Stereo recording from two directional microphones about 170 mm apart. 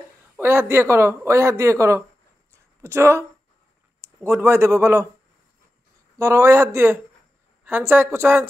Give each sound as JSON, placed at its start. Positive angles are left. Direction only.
{"t": 0.4, "sound": "speech", "side_deg": -15}
{"t": 6.1, "sound": "speech", "side_deg": -15}